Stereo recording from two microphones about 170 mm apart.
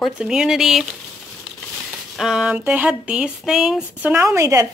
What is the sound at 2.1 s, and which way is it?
Speech, 5° right (ahead or behind).